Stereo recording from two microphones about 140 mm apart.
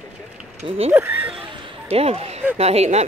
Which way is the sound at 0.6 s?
45° right (ahead or behind).